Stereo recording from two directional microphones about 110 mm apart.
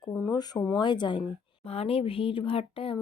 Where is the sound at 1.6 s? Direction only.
65° left (ahead or behind).